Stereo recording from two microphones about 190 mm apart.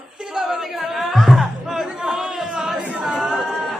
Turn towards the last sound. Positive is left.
turn(degrees=-5)  # may be behind; listen again after turning